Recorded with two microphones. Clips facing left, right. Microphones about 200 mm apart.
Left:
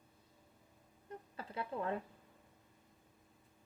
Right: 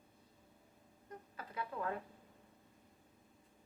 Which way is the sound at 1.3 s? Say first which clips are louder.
Left 2 dB; 30° left (ahead or behind).